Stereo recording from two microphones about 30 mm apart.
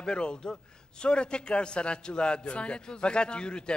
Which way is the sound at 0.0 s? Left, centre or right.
Left.